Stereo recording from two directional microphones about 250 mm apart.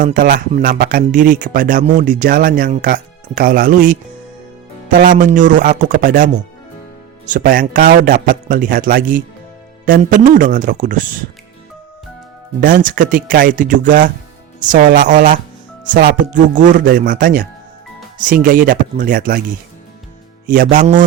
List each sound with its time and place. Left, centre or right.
0.0 s speech: right
12.5 s speech: right
18.4 s speech: right
20.5 s speech: right